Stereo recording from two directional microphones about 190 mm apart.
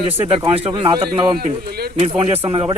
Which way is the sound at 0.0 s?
30° right (ahead or behind).